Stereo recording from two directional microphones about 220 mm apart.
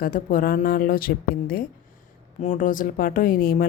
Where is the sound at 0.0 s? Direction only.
40° left (ahead or behind).